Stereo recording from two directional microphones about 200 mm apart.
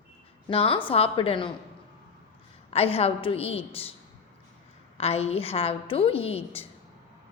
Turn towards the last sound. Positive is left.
turn(degrees=30)  # may be behind; listen again after turning